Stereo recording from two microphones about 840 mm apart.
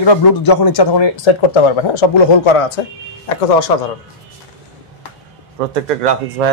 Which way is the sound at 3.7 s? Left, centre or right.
Left.